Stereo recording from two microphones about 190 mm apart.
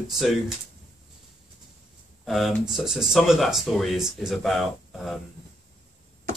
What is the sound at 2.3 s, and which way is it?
Speech, centre (ahead or behind).